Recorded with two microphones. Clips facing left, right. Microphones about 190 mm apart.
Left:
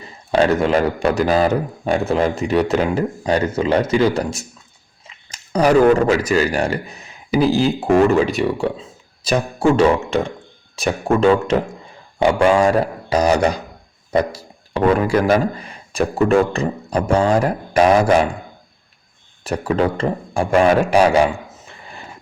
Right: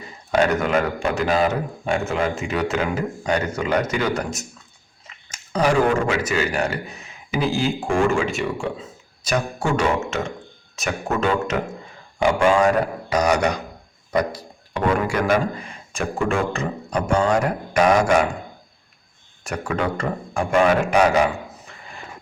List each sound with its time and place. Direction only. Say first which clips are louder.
0.3 s a man's voice: left 4 dB; 30° left (ahead or behind)
19.5 s a man's voice: left 6 dB; 30° left (ahead or behind)